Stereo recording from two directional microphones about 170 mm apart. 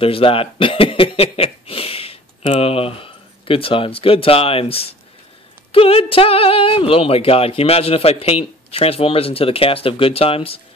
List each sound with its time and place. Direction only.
0.0 s speech: 35° left (ahead or behind)